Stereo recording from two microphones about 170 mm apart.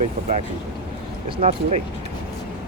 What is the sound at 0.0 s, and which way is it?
Speech, 40° right (ahead or behind).